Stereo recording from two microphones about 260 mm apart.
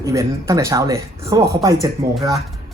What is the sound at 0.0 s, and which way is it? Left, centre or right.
Speech, centre.